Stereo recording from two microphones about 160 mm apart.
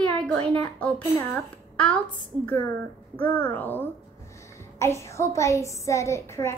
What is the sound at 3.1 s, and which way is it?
A woman's voice, 10° left (ahead or behind).